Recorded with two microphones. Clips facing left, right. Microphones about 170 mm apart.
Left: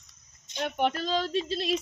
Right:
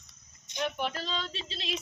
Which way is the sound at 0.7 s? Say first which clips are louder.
Left 7 dB; 55° left (ahead or behind).